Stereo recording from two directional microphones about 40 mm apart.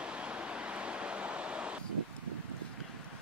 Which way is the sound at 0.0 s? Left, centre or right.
Right.